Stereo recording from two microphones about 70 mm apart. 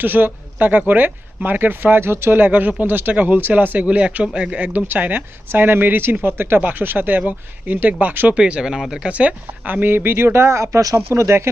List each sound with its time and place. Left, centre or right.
0.0 s speech: right
8.4 s speech: centre; by 11.4 s right